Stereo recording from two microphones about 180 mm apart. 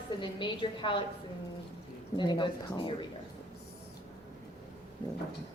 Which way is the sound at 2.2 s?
25° left (ahead or behind).